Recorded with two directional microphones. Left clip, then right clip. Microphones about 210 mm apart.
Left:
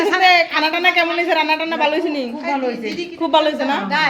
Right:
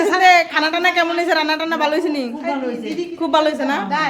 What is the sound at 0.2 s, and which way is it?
A woman's voice, 10° right (ahead or behind).